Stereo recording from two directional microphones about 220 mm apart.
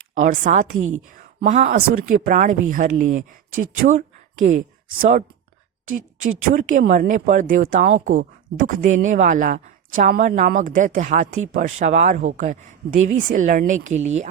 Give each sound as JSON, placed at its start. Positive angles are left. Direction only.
{"t": 0.2, "sound": "speech", "side_deg": -35}
{"t": 6.5, "sound": "speech", "side_deg": -35}